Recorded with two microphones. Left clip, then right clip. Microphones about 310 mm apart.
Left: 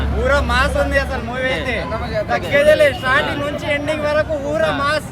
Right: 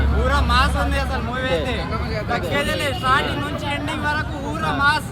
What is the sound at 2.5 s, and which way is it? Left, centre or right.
Speech, centre.